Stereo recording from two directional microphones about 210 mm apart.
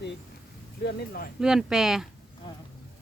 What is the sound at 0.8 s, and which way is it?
Speech, 50° left (ahead or behind).